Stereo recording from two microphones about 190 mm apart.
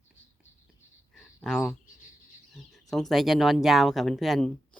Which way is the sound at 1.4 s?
5° left (ahead or behind).